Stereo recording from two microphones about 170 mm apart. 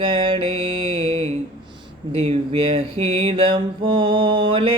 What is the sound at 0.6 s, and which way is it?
Mantra, 30° right (ahead or behind).